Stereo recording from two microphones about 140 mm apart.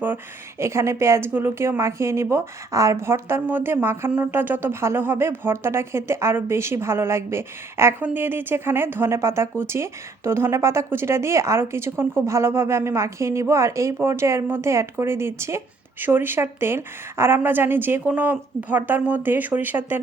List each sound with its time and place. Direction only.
0.6 s a woman's voice: 20° right (ahead or behind)